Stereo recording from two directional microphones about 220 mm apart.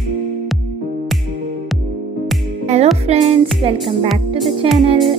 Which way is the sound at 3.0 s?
30° right (ahead or behind).